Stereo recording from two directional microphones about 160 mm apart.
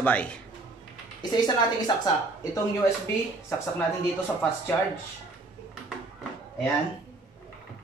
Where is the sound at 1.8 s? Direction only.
20° left (ahead or behind).